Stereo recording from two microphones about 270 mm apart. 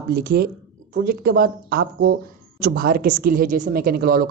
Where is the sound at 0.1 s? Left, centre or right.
Right.